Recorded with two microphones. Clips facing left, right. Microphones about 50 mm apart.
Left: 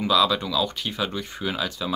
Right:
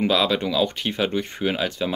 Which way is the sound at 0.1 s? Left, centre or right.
Right.